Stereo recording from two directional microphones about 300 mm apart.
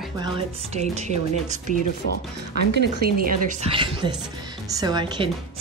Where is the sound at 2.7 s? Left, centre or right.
Right.